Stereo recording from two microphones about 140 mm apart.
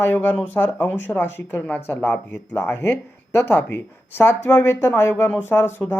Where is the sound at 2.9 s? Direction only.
10° left (ahead or behind).